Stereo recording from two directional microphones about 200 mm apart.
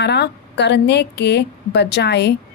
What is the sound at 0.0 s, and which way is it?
A woman's voice, 55° left (ahead or behind).